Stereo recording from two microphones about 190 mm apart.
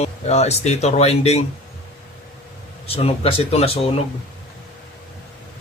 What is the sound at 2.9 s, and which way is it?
Speech, 30° left (ahead or behind).